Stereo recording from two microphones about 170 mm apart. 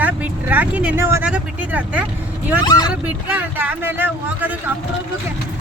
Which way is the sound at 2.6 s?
25° left (ahead or behind).